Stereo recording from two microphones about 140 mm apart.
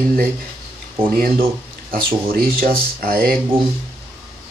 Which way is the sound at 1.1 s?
90° right.